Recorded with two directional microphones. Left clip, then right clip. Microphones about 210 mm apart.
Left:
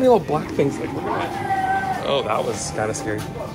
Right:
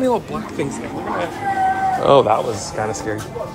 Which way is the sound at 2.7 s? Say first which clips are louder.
Right 1 dB; 5° right (ahead or behind).